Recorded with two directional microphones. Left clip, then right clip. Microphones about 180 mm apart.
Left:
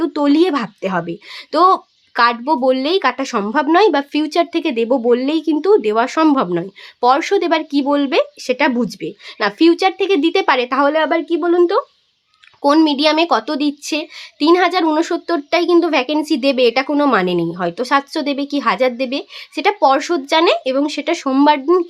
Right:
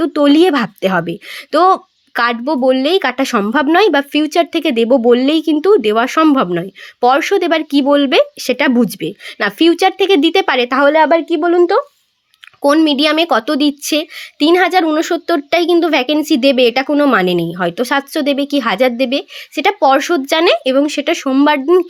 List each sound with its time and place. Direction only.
0.0 s speech: 15° right (ahead or behind)